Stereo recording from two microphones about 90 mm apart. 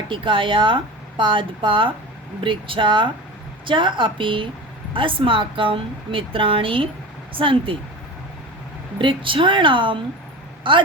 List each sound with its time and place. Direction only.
0.1 s speech: 70° right (ahead or behind)
9.0 s speech: 70° right (ahead or behind)